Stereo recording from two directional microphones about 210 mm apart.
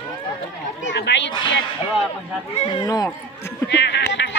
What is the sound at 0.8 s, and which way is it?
Speech, 55° left (ahead or behind).